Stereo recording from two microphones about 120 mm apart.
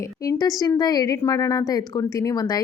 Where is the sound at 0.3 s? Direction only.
30° left (ahead or behind).